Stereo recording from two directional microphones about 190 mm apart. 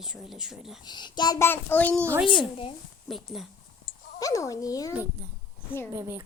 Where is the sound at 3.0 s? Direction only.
Centre (ahead or behind).